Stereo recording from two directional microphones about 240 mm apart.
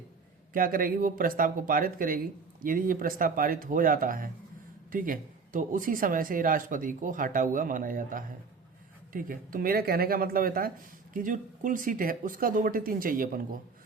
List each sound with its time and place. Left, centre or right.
0.5 s speech: right